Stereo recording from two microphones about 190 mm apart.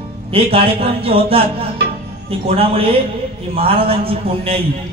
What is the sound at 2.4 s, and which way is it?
Speech, 30° right (ahead or behind).